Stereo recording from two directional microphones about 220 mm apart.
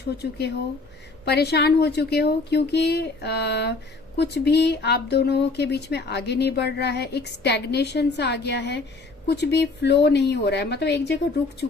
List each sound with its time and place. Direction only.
0.2 s speech: 50° left (ahead or behind)